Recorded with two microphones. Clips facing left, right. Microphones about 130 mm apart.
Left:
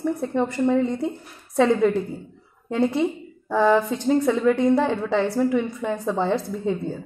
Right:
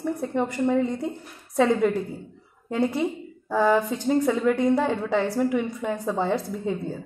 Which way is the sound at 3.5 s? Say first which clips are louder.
Left 2 dB; 10° right (ahead or behind).